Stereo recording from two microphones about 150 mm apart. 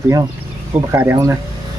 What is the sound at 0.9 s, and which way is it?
Speech, 15° right (ahead or behind).